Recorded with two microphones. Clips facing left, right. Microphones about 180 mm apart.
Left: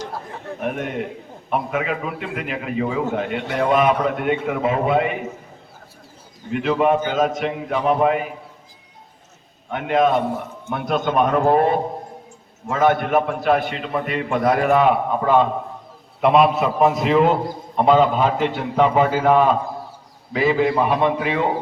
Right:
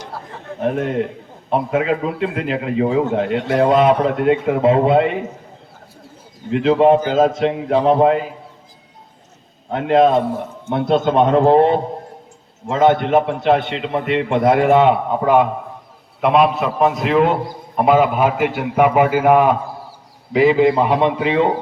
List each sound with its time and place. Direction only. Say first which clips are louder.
0.6 s a man's voice: right 6 dB; 30° right (ahead or behind)
6.5 s a man's voice: right 6 dB; 30° right (ahead or behind)
9.6 s a man's voice: right 5 dB; 30° right (ahead or behind)
16.2 s a man's voice: right 1 dB; centre (ahead or behind); by 21.5 s 20° right (ahead or behind)